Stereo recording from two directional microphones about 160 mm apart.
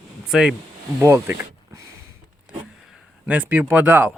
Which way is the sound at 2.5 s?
Centre (ahead or behind).